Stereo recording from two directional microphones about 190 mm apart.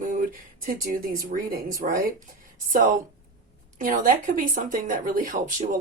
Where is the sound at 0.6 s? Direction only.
45° right (ahead or behind).